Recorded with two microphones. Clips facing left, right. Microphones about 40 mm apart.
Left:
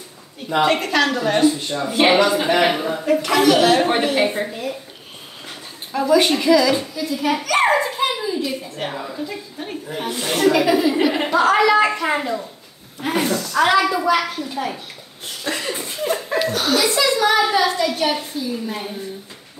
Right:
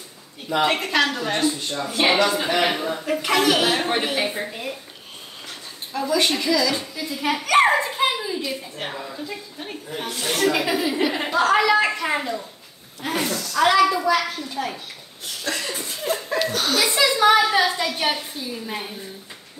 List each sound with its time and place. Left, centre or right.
0.7 s a woman's voice: centre
3.3 s a woman's voice: centre
4.1 s a woman's voice: centre
4.5 s a child's voice: centre
5.5 s speech: centre
7.0 s a woman's voice: centre
7.6 s a sound: centre
8.7 s a woman's voice: centre
15.4 s speech: left
16.0 s laughter: centre
16.3 s speech: centre
16.9 s a child's voice: centre